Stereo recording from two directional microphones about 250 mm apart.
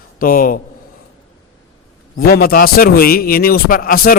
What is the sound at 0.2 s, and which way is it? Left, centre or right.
Speech, left.